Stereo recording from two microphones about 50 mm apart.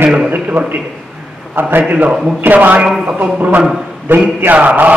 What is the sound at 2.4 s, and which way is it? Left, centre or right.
Speech, right.